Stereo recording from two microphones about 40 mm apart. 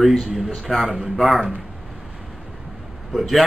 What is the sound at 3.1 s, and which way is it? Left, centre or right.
Speech, centre.